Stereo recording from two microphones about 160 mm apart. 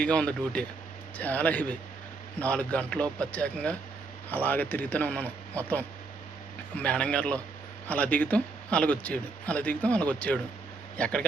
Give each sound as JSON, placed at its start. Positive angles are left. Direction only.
{"t": 0.0, "sound": "speech", "side_deg": 5}